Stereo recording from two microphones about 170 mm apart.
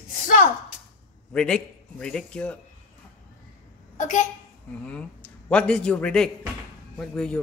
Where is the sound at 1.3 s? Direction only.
5° left (ahead or behind).